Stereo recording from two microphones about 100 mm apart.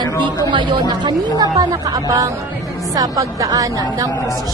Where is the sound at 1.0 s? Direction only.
40° right (ahead or behind).